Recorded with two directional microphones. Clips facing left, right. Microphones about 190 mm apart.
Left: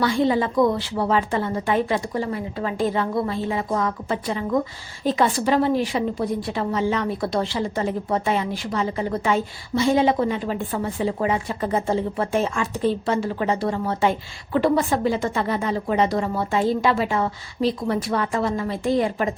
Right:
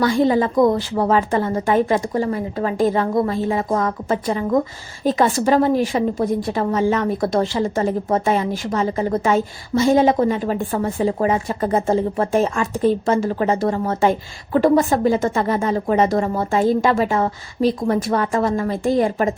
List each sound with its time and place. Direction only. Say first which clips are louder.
0.0 s a woman's voice: right 4 dB; 45° right (ahead or behind)